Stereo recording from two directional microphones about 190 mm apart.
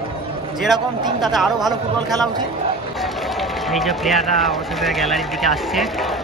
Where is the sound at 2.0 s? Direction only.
20° right (ahead or behind).